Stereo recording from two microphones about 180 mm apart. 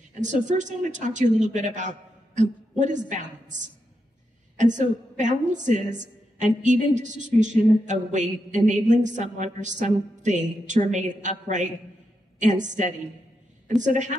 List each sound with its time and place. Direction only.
0.2 s a woman's voice: 40° right (ahead or behind)
4.6 s a woman's voice: 45° right (ahead or behind)